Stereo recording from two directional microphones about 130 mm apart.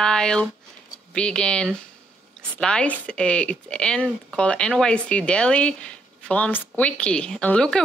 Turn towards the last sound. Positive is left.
turn(degrees=5)  # may be behind; listen again after turning